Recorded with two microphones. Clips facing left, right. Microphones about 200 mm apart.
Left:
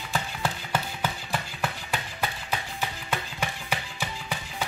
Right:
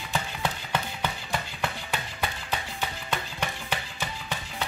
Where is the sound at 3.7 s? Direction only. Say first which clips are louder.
Left 1 dB; 10° left (ahead or behind).